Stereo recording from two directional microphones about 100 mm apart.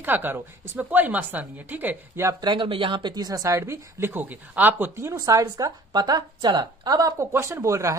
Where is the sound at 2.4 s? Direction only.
50° right (ahead or behind).